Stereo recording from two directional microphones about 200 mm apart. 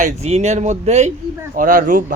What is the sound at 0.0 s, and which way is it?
Speech, 30° right (ahead or behind).